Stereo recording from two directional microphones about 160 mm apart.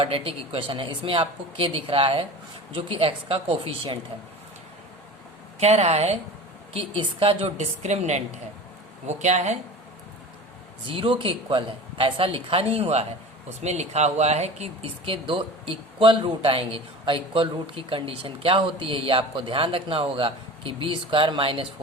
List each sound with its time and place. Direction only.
0.0 s speech: 35° right (ahead or behind)
5.5 s a woman's voice: 45° right (ahead or behind)
10.8 s speech: 35° right (ahead or behind)